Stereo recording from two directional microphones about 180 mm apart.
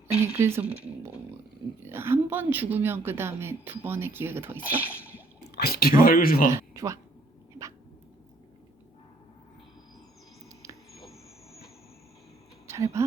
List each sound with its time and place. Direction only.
0.3 s a woman's voice: 15° right (ahead or behind)
5.4 s speech: 60° left (ahead or behind)
6.5 s speech: 15° right (ahead or behind)
12.6 s a sound: 15° right (ahead or behind)